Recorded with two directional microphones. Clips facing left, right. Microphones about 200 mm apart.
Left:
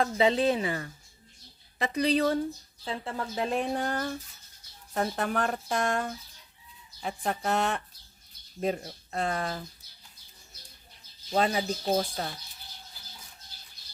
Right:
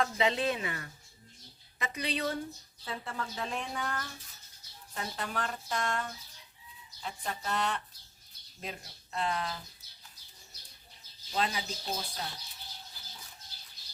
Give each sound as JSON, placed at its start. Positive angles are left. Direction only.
{"t": 0.0, "sound": "a woman's voice", "side_deg": 30}
{"t": 4.9, "sound": "speech", "side_deg": 50}
{"t": 11.3, "sound": "speech", "side_deg": 50}